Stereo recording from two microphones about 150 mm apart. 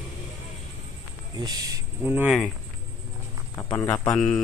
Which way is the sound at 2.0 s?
10° right (ahead or behind).